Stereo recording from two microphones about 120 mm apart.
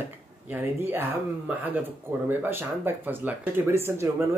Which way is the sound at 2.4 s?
15° right (ahead or behind).